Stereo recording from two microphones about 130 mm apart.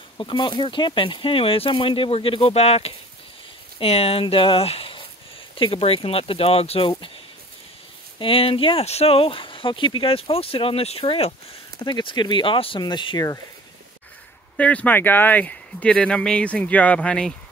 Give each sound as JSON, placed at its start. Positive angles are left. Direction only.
{"t": 0.2, "sound": "speech", "side_deg": 40}
{"t": 8.2, "sound": "speech", "side_deg": 45}
{"t": 11.8, "sound": "speech", "side_deg": 35}
{"t": 14.6, "sound": "speech", "side_deg": 10}